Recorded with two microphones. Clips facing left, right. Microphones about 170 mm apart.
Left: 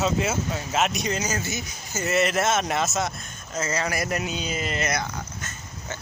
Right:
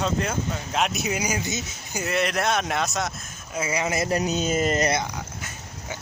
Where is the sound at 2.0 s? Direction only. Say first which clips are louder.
Left 2 dB; centre (ahead or behind).